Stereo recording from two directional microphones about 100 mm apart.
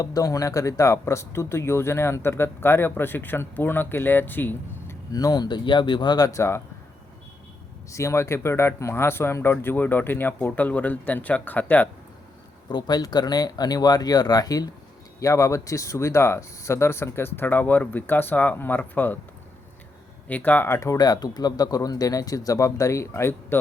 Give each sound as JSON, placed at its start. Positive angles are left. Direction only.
{"t": 0.0, "sound": "speech", "side_deg": 35}
{"t": 5.1, "sound": "speech", "side_deg": 40}
{"t": 7.9, "sound": "speech", "side_deg": 30}
{"t": 12.6, "sound": "speech", "side_deg": 45}
{"t": 20.2, "sound": "speech", "side_deg": 15}